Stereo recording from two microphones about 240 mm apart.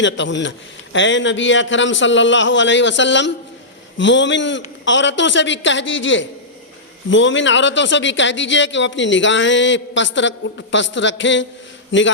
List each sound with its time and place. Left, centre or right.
0.0 s a man's voice: left